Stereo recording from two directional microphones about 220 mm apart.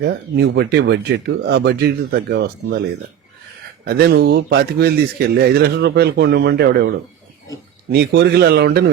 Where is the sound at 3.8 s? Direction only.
45° right (ahead or behind).